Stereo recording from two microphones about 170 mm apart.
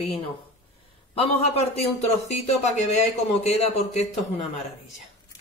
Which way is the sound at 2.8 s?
40° left (ahead or behind).